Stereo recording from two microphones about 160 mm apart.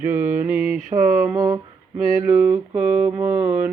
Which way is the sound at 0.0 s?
10° right (ahead or behind).